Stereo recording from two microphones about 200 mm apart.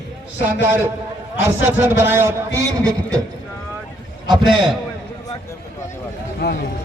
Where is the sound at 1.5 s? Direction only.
10° right (ahead or behind).